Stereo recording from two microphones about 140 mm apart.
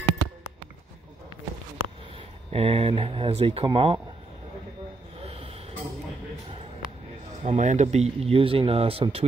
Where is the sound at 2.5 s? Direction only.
45° right (ahead or behind).